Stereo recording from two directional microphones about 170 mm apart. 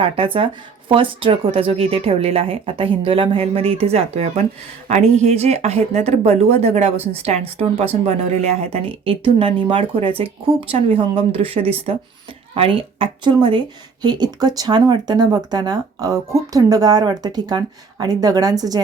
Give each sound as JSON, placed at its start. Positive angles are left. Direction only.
{"t": 0.0, "sound": "a woman's voice", "side_deg": -35}